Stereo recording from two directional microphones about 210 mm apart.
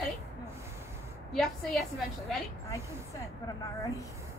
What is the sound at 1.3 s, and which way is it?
Speech, centre (ahead or behind).